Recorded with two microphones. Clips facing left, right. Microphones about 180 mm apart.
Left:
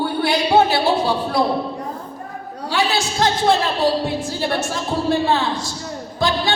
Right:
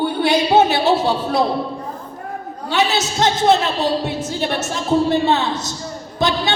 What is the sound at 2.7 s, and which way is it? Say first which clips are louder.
Speech: right 2 dB; 20° right (ahead or behind).